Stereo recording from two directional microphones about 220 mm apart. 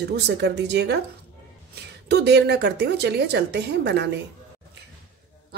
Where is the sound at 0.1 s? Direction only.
50° right (ahead or behind).